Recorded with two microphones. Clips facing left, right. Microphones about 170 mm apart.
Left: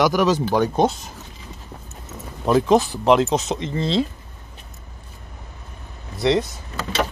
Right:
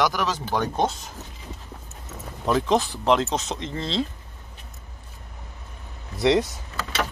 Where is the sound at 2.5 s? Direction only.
5° left (ahead or behind).